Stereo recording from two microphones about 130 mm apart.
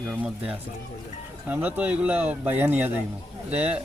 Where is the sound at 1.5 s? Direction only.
10° right (ahead or behind).